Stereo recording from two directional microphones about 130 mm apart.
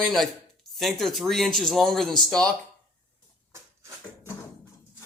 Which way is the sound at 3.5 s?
20° right (ahead or behind).